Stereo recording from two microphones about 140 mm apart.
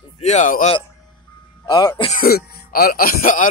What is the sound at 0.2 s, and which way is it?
Speech, 55° left (ahead or behind).